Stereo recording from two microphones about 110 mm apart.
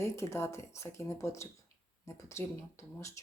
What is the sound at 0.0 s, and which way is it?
Speech, 25° left (ahead or behind).